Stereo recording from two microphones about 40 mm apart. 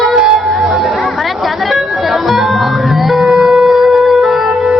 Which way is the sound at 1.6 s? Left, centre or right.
Centre.